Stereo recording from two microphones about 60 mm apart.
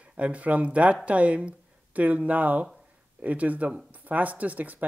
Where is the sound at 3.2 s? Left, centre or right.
Right.